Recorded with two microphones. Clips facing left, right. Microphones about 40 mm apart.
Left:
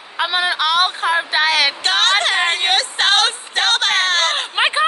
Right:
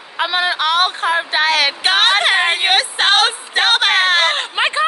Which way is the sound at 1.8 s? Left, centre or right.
Centre.